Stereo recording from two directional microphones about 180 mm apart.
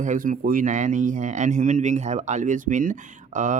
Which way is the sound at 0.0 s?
45° right (ahead or behind).